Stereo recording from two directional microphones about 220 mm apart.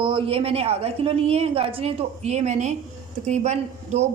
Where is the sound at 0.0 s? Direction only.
25° right (ahead or behind).